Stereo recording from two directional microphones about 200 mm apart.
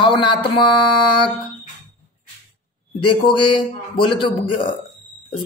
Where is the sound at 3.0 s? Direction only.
25° left (ahead or behind).